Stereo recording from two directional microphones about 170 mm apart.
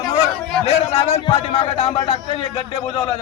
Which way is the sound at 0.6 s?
35° left (ahead or behind).